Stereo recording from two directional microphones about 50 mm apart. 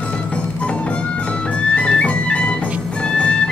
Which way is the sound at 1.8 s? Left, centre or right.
Left.